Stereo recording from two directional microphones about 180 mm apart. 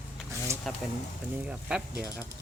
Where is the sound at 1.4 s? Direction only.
5° right (ahead or behind).